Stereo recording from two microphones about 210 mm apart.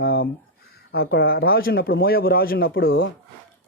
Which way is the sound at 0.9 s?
50° left (ahead or behind).